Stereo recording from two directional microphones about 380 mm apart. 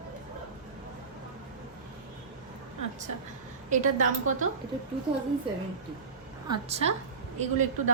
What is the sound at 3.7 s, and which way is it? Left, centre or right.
Speech, centre.